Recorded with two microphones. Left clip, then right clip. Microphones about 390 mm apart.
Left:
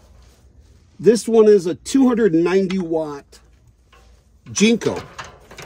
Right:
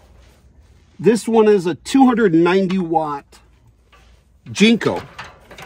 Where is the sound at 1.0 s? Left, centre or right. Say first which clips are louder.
Left 1 dB; centre.